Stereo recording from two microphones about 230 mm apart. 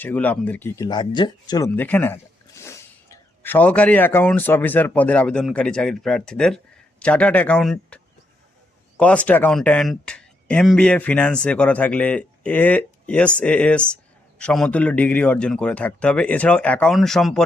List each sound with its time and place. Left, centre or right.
0.0 s speech: centre